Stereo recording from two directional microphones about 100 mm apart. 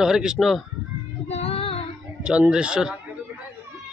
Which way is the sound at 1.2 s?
85° left.